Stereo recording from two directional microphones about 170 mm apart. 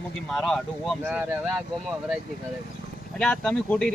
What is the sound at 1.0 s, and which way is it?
Speech, 10° right (ahead or behind).